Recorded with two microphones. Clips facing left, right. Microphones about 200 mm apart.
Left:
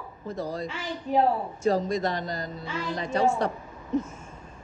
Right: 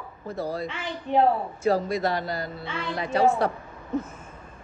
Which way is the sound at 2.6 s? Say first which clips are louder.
Right 1 dB; 40° left (ahead or behind).